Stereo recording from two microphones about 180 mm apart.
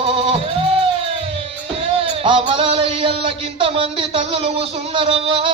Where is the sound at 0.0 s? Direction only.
30° right (ahead or behind).